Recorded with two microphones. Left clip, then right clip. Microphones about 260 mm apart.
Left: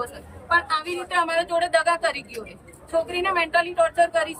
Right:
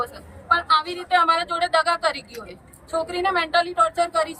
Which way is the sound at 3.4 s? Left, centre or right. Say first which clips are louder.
Even; centre.